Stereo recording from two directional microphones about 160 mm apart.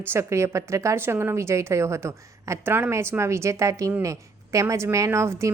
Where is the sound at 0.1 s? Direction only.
15° right (ahead or behind).